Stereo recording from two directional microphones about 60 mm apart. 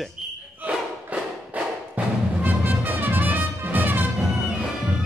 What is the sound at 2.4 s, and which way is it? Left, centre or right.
Music, right.